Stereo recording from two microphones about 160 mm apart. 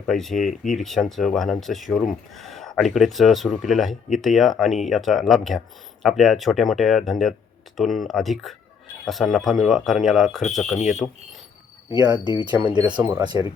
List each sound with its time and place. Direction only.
0.1 s speech: centre (ahead or behind)
12.0 s speech: 25° right (ahead or behind)